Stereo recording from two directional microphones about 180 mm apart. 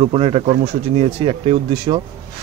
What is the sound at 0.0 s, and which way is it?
Speech, 35° right (ahead or behind).